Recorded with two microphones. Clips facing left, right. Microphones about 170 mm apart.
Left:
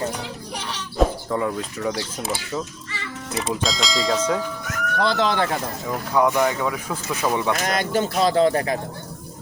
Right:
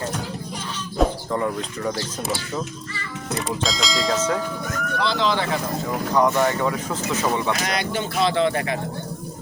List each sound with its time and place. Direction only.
0.9 s bird: centre (ahead or behind)
3.3 s speech: centre (ahead or behind)
4.9 s speech: 50° left (ahead or behind)
6.1 s speech: 10° left (ahead or behind)
7.6 s speech: 45° left (ahead or behind)